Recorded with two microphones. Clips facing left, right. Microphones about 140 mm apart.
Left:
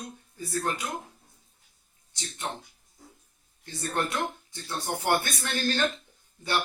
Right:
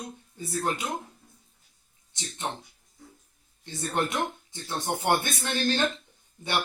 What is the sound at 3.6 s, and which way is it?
Speech, 20° right (ahead or behind).